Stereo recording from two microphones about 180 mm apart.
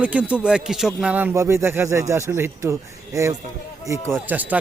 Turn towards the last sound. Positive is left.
turn(degrees=-10)  # may be behind; listen again after turning